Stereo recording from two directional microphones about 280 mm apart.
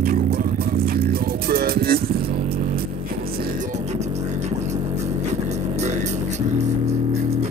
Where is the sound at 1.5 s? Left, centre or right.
Right.